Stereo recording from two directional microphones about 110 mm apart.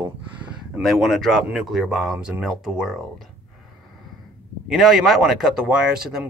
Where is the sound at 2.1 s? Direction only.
15° right (ahead or behind).